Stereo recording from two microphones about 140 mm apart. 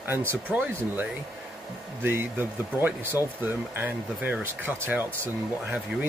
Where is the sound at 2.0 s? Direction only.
15° right (ahead or behind).